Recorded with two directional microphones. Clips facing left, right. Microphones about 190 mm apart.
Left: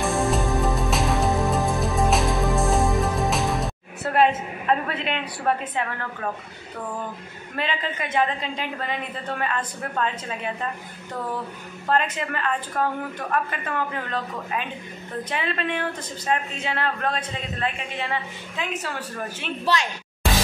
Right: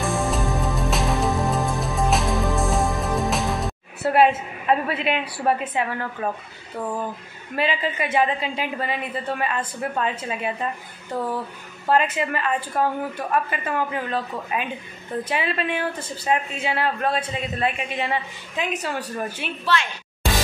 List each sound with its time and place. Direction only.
0.0 s music: centre (ahead or behind)
4.0 s a woman's voice: 10° right (ahead or behind)
7.5 s speech: 10° right (ahead or behind)
11.9 s speech: 10° right (ahead or behind)
19.7 s speech: 40° left (ahead or behind)